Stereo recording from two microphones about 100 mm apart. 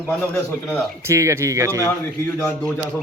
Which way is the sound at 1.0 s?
30° right (ahead or behind).